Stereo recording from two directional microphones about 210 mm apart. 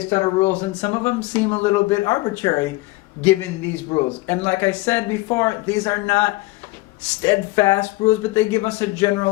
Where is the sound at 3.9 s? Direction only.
20° left (ahead or behind).